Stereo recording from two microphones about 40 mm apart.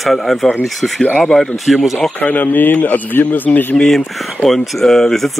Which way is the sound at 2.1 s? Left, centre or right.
Left.